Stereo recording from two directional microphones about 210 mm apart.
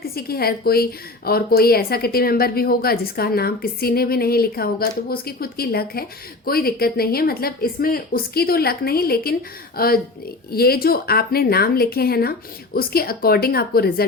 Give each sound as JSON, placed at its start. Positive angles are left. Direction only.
{"t": 0.1, "sound": "a woman's voice", "side_deg": 45}